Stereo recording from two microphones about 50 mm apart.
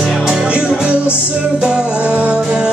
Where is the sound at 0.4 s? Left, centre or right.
Centre.